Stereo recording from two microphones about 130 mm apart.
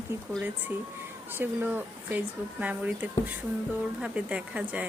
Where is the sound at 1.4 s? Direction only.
15° right (ahead or behind).